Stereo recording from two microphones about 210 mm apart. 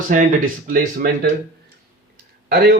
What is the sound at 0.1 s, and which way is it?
Speech, 40° right (ahead or behind).